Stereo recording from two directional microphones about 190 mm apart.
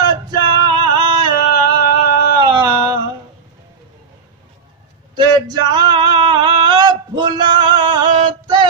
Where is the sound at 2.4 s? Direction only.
25° right (ahead or behind).